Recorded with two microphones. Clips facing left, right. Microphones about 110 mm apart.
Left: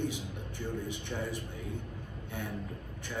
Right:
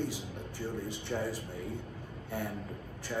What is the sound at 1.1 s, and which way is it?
Speech, 10° right (ahead or behind).